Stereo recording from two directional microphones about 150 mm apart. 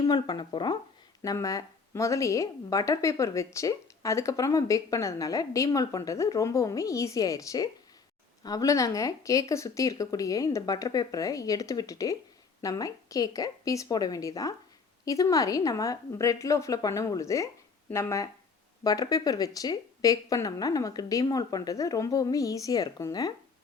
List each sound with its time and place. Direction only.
0.0 s a woman's voice: 30° left (ahead or behind)